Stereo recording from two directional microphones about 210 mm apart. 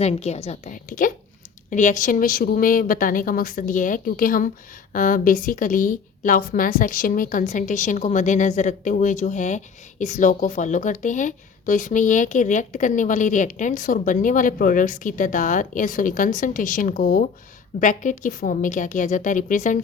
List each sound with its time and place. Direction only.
0.0 s a woman's voice: 30° left (ahead or behind)